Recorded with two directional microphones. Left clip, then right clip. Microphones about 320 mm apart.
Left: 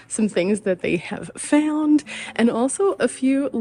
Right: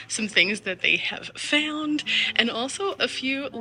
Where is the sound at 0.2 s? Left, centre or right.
Centre.